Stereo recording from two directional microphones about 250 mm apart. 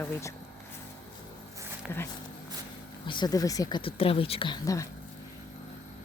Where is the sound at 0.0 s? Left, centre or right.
Centre.